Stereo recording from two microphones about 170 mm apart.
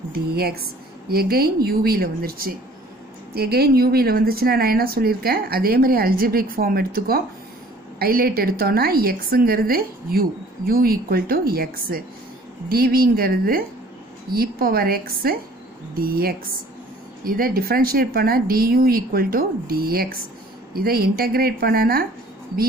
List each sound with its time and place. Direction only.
0.1 s a woman's voice: 65° right (ahead or behind)